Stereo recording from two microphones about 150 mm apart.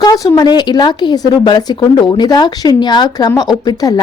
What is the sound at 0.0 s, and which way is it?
Speech, 25° left (ahead or behind).